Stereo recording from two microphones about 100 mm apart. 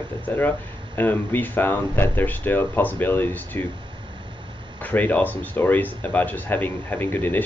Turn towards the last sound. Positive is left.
turn(degrees=20)  # may be behind; listen again after turning